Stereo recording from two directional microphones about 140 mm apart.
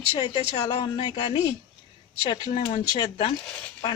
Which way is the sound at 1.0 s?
30° left (ahead or behind).